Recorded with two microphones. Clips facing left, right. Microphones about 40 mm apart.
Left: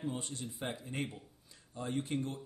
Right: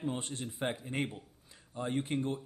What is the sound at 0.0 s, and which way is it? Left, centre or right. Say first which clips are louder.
Speech: right 3 dB; right.